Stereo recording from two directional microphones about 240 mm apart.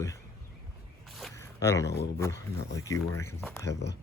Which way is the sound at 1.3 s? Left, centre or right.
Centre.